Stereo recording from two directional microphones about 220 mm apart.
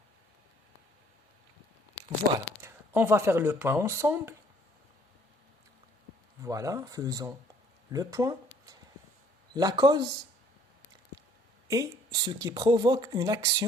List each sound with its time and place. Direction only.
2.6 s speech: 10° right (ahead or behind)
6.4 s speech: 15° right (ahead or behind)
11.7 s speech: 15° right (ahead or behind)